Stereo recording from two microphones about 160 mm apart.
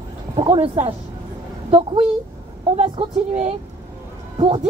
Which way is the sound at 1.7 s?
35° right (ahead or behind).